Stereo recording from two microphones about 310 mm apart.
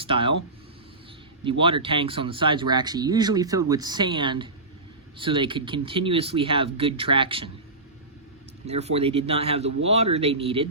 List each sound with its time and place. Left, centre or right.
0.0 s speech: centre
1.5 s speech: centre
8.6 s speech: centre